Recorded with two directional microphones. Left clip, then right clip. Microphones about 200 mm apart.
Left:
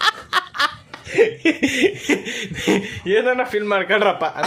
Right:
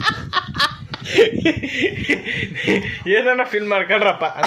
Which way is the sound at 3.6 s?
20° left (ahead or behind).